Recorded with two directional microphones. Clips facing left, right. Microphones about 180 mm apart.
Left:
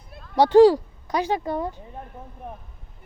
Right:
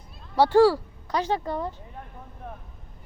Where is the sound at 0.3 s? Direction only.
20° left (ahead or behind).